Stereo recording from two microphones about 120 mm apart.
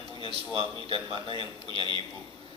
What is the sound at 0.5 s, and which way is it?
A man's voice, 45° right (ahead or behind).